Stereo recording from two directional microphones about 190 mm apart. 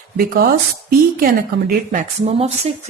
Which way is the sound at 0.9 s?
50° right (ahead or behind).